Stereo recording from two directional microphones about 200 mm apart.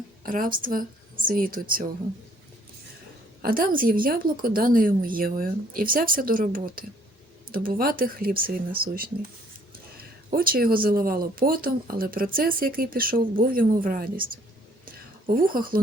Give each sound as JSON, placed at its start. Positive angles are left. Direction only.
{"t": 0.2, "sound": "speech", "side_deg": -45}
{"t": 3.4, "sound": "speech", "side_deg": -45}
{"t": 14.8, "sound": "a sound", "side_deg": -45}